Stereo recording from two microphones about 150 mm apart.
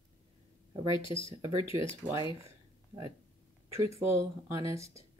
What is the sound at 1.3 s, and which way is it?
Speech, 25° right (ahead or behind).